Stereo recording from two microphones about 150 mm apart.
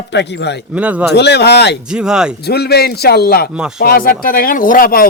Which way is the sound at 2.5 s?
90° left.